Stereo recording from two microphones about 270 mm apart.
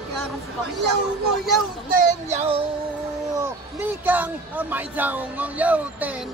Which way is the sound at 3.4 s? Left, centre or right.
Centre.